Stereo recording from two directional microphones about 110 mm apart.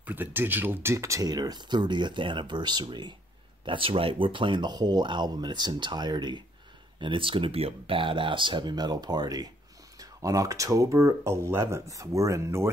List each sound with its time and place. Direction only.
0.0 s speech: 15° right (ahead or behind)